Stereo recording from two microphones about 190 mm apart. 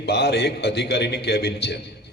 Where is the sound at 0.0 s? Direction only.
60° left (ahead or behind).